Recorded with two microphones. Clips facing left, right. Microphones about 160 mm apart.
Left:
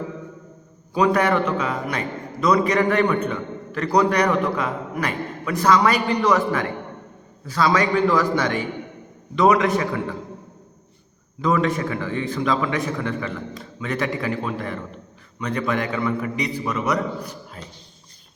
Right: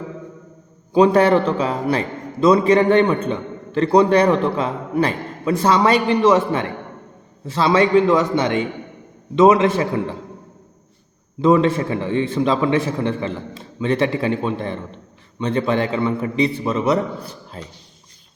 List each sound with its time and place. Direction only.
0.9 s a man's voice: 30° right (ahead or behind)
11.3 s a man's voice: 30° right (ahead or behind)